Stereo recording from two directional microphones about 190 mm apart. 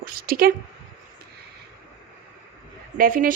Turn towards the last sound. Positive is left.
turn(degrees=-45)  # may be behind; listen again after turning